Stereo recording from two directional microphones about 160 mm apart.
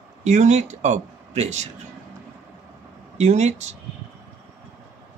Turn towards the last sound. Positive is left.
turn(degrees=-45)  # may be behind; listen again after turning